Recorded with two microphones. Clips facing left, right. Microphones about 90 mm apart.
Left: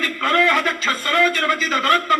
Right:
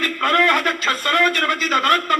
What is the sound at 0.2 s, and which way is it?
Speech, 50° right (ahead or behind).